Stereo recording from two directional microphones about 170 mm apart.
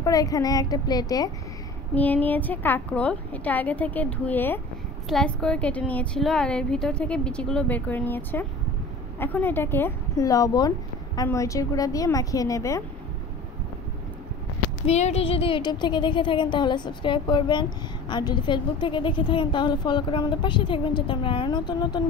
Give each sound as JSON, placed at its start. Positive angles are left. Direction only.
{"t": 0.0, "sound": "speech", "side_deg": 20}
{"t": 2.0, "sound": "a woman's voice", "side_deg": 10}
{"t": 14.9, "sound": "speech", "side_deg": 40}